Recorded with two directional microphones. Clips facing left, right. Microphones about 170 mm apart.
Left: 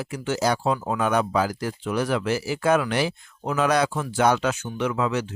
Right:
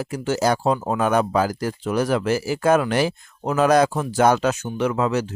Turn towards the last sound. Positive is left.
turn(degrees=-40)  # may be behind; listen again after turning